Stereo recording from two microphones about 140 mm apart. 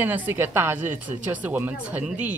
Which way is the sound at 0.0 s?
15° right (ahead or behind).